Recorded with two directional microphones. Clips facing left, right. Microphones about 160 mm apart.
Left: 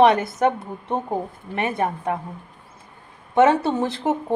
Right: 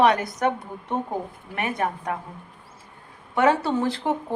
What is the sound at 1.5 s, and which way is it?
Speech, 25° left (ahead or behind).